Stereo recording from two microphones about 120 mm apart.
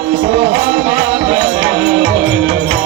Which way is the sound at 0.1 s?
10° right (ahead or behind).